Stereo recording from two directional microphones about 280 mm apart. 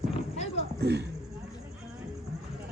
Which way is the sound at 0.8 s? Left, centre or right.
Right.